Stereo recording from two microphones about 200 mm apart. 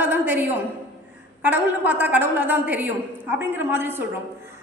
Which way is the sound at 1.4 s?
10° right (ahead or behind).